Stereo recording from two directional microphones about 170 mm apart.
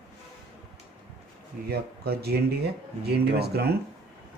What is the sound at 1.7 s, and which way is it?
A man's voice, 70° right (ahead or behind).